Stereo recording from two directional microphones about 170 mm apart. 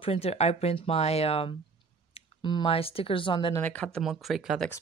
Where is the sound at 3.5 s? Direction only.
10° left (ahead or behind).